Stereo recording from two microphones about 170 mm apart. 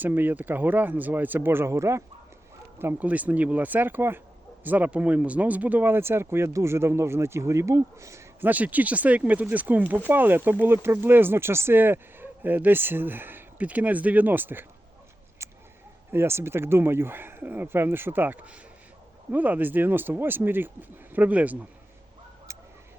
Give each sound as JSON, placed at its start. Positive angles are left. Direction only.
{"t": 0.0, "sound": "speech", "side_deg": -10}
{"t": 15.4, "sound": "a sound", "side_deg": -15}
{"t": 16.1, "sound": "speech", "side_deg": -15}